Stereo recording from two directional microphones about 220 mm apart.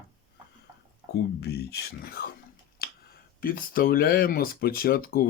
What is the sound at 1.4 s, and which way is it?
Speech, 45° left (ahead or behind).